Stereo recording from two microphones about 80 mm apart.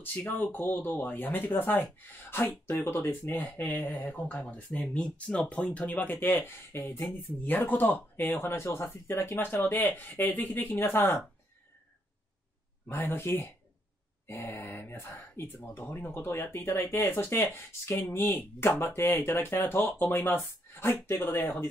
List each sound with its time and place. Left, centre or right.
0.0 s speech: left
8.4 s speech: left
12.8 s speech: left